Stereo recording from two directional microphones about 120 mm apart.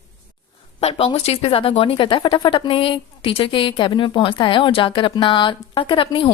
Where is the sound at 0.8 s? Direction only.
55° left (ahead or behind).